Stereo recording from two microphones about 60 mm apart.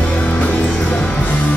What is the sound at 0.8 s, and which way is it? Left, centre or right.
Music, left.